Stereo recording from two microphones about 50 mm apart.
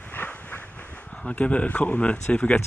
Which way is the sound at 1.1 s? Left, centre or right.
Left.